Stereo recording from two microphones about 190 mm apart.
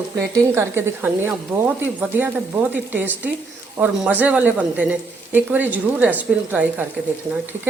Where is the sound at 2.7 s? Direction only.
10° right (ahead or behind).